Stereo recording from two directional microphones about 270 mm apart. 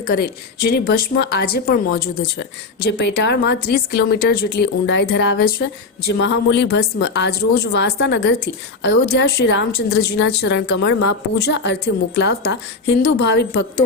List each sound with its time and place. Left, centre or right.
0.1 s a woman's voice: left